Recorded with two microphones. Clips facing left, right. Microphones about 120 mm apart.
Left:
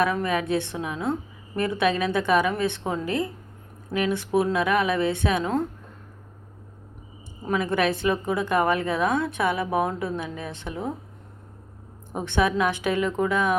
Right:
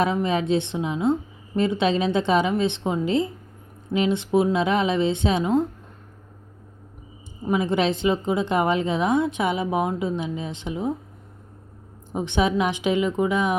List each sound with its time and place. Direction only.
0.0 s speech: 20° right (ahead or behind)
7.4 s speech: 20° right (ahead or behind)
12.1 s a woman's voice: 15° right (ahead or behind)